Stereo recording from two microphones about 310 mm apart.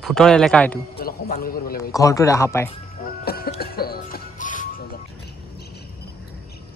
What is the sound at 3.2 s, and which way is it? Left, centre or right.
Music, left.